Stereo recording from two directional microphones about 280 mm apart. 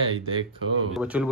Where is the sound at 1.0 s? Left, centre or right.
Centre.